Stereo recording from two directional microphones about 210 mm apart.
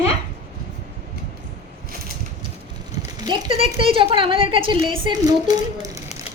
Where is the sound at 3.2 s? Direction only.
20° right (ahead or behind).